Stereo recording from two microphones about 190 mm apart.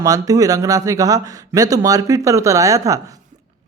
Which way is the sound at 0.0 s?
20° right (ahead or behind).